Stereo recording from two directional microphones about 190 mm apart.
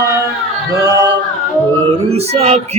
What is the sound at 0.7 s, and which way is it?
Singing, 20° right (ahead or behind).